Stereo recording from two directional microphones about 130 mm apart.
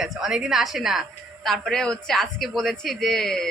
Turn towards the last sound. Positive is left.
turn(degrees=5)  # may be behind; listen again after turning